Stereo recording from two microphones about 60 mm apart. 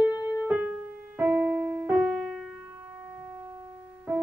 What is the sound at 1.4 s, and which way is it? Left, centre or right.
Keyboard, right.